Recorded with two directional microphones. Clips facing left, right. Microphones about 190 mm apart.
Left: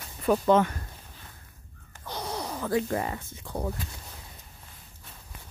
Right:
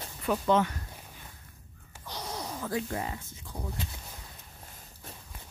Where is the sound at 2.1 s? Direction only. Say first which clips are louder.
Left 4 dB; 60° left (ahead or behind).